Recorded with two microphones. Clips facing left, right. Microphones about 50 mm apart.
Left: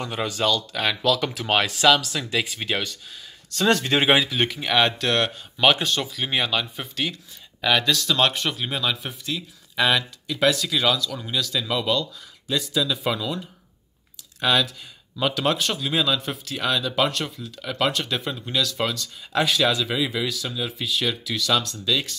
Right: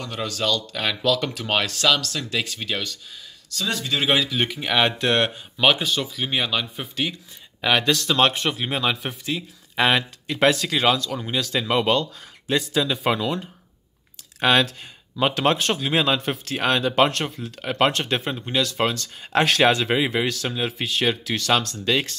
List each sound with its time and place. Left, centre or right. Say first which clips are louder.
0.0 s speech: left 2 dB; centre
3.6 s speech: left 7 dB; left
4.3 s speech: even; centre
4.9 s speech: right 2 dB; right
5.6 s speech: even; centre
7.6 s speech: right 1 dB; right
14.4 s speech: right 3 dB; right
18.3 s speech: right 2 dB; right
18.9 s speech: right 3 dB; right